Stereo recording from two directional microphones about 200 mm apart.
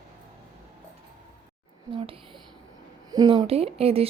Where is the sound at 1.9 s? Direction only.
25° right (ahead or behind).